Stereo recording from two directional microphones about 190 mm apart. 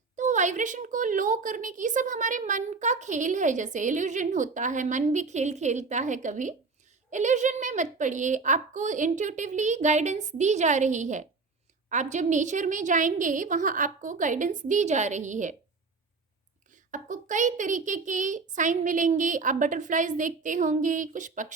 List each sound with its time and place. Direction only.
0.2 s a woman's voice: 40° right (ahead or behind)
16.7 s a woman's voice: 40° right (ahead or behind)